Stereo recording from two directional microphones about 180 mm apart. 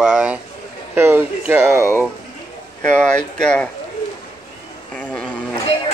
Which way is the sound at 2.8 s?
5° left (ahead or behind).